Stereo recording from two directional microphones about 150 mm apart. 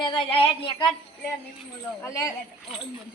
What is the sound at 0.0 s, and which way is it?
Speech, 30° left (ahead or behind).